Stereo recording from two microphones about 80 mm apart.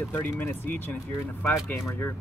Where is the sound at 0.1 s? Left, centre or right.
Left.